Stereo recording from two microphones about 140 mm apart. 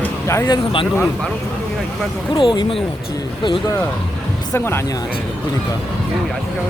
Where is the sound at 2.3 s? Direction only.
35° left (ahead or behind).